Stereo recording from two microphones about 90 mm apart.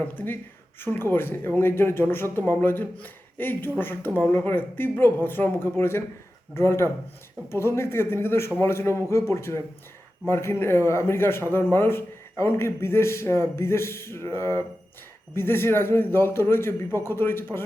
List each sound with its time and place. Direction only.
0.0 s speech: 20° left (ahead or behind)